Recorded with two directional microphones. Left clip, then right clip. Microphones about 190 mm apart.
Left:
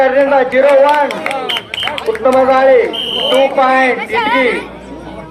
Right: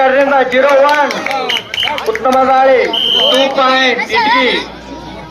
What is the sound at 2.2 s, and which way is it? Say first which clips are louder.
A man's voice: even; 35° left (ahead or behind).